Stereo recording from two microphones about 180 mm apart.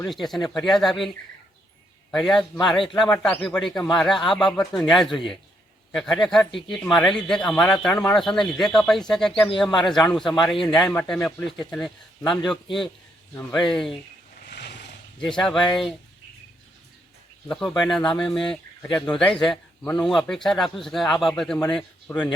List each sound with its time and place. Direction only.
0.1 s speech: centre (ahead or behind)
2.1 s speech: 5° left (ahead or behind)
13.5 s speech: centre (ahead or behind)
14.4 s vehicle: 65° left (ahead or behind)
15.2 s speech: 5° left (ahead or behind)
17.5 s speech: 5° left (ahead or behind)